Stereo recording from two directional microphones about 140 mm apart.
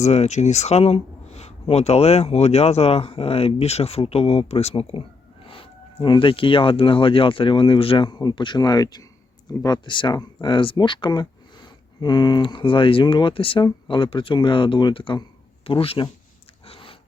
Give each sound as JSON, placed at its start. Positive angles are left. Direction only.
{"t": 0.0, "sound": "speech", "side_deg": 55}
{"t": 16.6, "sound": "dog", "side_deg": 40}